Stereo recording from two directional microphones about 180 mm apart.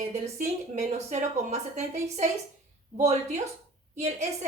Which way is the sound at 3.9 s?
40° right (ahead or behind).